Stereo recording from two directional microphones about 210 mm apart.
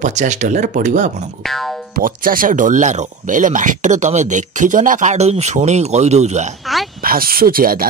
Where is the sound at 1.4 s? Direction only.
Centre (ahead or behind).